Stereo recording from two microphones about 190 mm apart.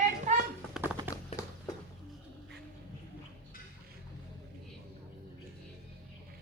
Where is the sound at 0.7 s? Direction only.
5° right (ahead or behind).